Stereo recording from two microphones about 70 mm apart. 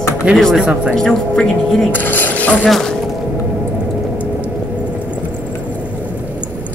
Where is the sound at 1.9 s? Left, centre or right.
Left.